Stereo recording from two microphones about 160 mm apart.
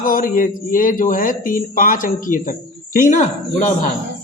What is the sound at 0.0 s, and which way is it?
A man's voice, 60° left (ahead or behind).